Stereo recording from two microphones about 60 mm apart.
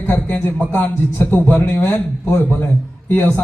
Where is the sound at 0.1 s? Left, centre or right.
Left.